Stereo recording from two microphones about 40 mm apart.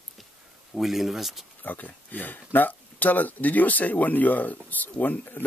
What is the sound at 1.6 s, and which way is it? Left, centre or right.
Speech, left.